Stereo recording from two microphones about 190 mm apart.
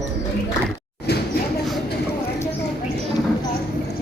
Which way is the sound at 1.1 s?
60° left (ahead or behind).